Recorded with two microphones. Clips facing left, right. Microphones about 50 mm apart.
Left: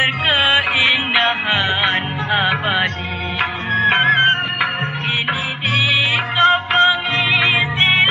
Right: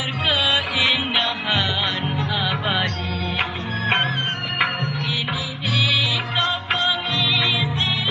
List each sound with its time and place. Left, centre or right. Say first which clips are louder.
0.0 s music: left 6 dB; left
4.0 s music: left 10 dB; left
5.7 s music: left 4 dB; left